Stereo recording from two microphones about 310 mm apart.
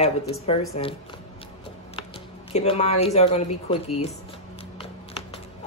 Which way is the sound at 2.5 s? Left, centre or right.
Centre.